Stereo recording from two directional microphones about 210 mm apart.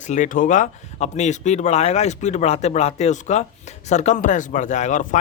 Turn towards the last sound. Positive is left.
turn(degrees=35)  # may be behind; listen again after turning